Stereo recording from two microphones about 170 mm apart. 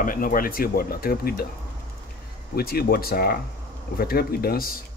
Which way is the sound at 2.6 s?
65° left (ahead or behind).